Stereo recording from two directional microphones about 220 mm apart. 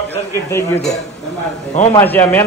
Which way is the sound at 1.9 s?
10° left (ahead or behind).